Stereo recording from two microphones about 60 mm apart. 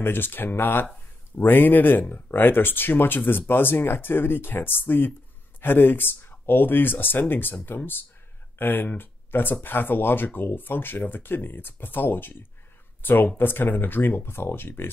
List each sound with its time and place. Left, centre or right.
0.0 s speech: left